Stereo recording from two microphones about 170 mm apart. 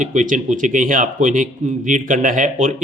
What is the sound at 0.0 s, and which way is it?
Speech, 50° right (ahead or behind).